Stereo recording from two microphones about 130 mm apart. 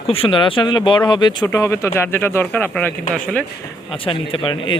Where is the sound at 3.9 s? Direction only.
45° left (ahead or behind).